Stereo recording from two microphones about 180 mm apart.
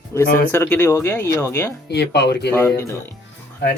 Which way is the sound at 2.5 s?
15° left (ahead or behind).